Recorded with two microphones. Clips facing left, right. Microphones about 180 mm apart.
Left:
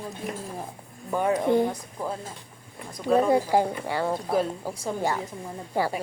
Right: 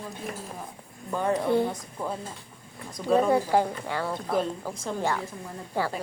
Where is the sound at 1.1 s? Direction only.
10° left (ahead or behind).